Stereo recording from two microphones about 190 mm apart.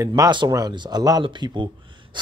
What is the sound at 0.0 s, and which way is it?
Speech, 20° right (ahead or behind).